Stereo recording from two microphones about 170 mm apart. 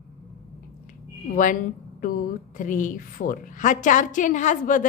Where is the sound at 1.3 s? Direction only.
50° left (ahead or behind).